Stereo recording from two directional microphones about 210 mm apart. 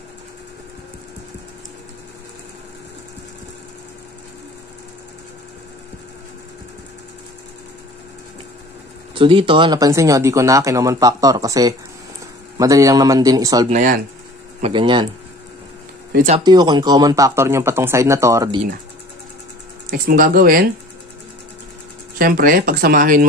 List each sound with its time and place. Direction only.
9.1 s speech: 25° right (ahead or behind)
13.7 s speech: 35° right (ahead or behind)
14.6 s speech: 25° right (ahead or behind)
16.1 s speech: 35° right (ahead or behind)
16.4 s speech: 20° right (ahead or behind)
19.9 s speech: 40° right (ahead or behind)
22.2 s speech: 40° right (ahead or behind)